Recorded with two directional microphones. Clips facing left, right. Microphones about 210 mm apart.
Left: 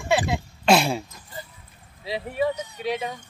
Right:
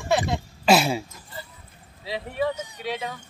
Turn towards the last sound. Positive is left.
turn(degrees=15)  # may be behind; listen again after turning